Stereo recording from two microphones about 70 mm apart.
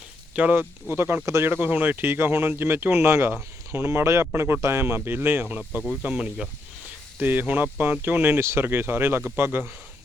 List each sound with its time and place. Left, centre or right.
0.4 s speech: right
0.9 s speech: right
6.0 s speech: centre
7.2 s speech: right